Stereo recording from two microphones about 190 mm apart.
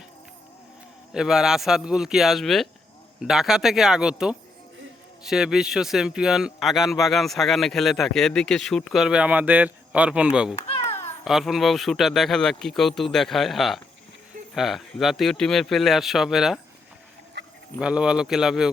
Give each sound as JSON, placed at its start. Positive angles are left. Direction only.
{"t": 1.1, "sound": "speech", "side_deg": 0}
{"t": 10.8, "sound": "babbling", "side_deg": 15}
{"t": 11.3, "sound": "speech", "side_deg": 0}
{"t": 17.4, "sound": "livestock", "side_deg": -70}
{"t": 17.7, "sound": "speech", "side_deg": -5}